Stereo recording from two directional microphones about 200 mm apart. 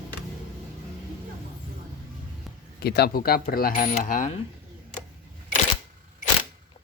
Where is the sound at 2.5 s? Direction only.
Centre (ahead or behind).